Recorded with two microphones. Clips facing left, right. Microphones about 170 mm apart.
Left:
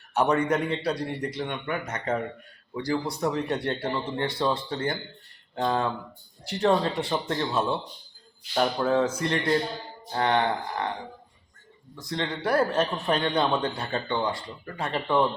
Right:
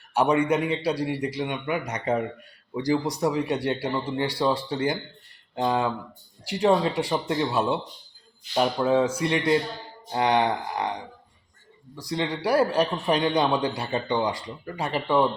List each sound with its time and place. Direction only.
0.2 s speech: 10° right (ahead or behind)
12.1 s speech: 10° right (ahead or behind)